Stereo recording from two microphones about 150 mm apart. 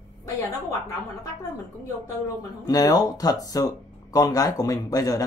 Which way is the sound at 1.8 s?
25° left (ahead or behind).